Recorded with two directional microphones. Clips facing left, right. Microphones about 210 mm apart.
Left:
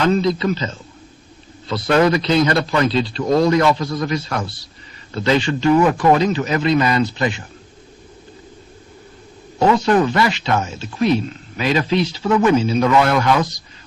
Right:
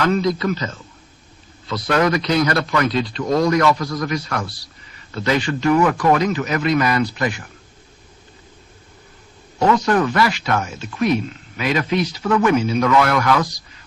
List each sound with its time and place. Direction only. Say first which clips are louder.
0.0 s speech: left 2 dB; 25° left (ahead or behind)
9.6 s speech: left 2 dB; 30° left (ahead or behind)